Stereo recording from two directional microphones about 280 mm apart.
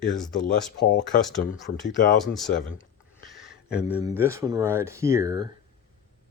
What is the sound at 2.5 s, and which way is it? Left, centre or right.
Speech, left.